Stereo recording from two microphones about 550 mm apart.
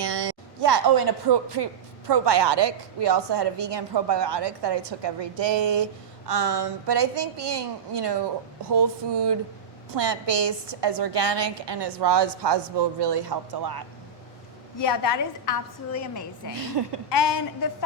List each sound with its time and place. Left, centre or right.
0.0 s a woman's voice: right
14.8 s a woman's voice: left
16.8 s speech: right
17.1 s a woman's voice: left